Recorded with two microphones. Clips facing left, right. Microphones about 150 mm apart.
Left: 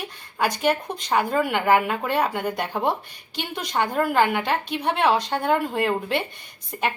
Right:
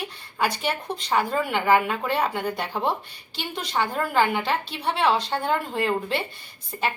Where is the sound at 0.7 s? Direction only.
10° left (ahead or behind).